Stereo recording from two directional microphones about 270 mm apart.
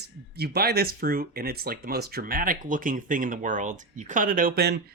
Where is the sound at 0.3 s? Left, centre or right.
Right.